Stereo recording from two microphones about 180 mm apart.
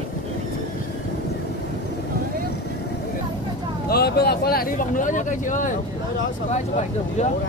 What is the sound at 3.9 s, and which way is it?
Speech, 60° left (ahead or behind).